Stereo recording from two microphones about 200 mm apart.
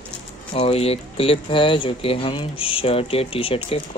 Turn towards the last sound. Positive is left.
turn(degrees=30)  # may be behind; listen again after turning